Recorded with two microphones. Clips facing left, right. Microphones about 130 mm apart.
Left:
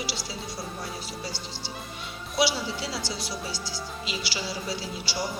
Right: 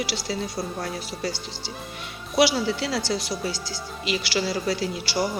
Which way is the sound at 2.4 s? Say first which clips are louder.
Right 6 dB; 65° right (ahead or behind).